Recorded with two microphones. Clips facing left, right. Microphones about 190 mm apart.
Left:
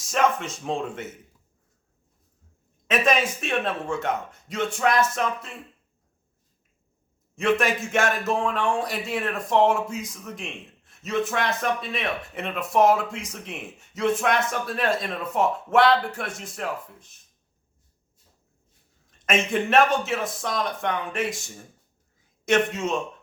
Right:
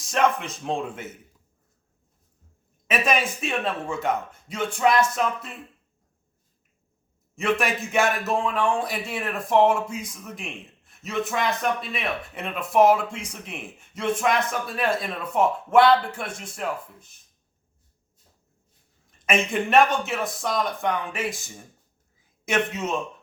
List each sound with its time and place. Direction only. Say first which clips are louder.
0.0 s speech: even; centre (ahead or behind)
2.8 s speech: left 2 dB; 5° right (ahead or behind)
7.3 s speech: left 2 dB; centre (ahead or behind)
19.2 s speech: even; centre (ahead or behind)